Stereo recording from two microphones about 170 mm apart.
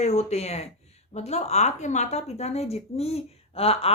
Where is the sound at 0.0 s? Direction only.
40° left (ahead or behind).